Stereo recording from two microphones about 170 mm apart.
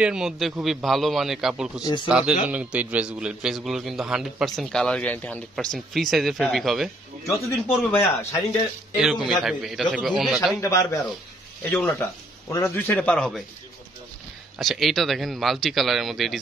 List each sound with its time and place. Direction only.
0.0 s a man's voice: 5° right (ahead or behind)
7.4 s a man's voice: 10° left (ahead or behind)
9.0 s a man's voice: 5° right (ahead or behind)
10.6 s a man's voice: 20° left (ahead or behind)
14.6 s a man's voice: centre (ahead or behind)